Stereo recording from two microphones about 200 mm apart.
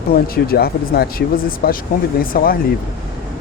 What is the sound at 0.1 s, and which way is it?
Speech, 50° left (ahead or behind).